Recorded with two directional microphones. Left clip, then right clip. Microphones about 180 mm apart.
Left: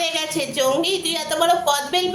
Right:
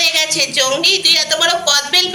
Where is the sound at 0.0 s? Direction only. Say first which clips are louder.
Right 8 dB; 45° left (ahead or behind).